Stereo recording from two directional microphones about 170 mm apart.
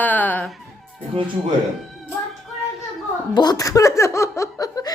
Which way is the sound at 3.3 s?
20° left (ahead or behind).